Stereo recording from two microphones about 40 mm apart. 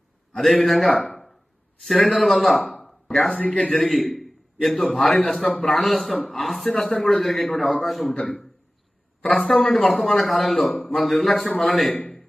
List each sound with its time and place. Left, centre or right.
0.3 s a man's voice: centre
0.9 s a sound: centre
1.8 s a man's voice: centre
3.3 s speech: left
3.7 s a man's voice: centre
9.3 s a man's voice: centre
11.3 s a man's voice: left
11.6 s a man's voice: centre